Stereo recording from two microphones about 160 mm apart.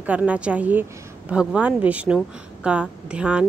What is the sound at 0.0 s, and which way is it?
A woman's voice, 10° right (ahead or behind).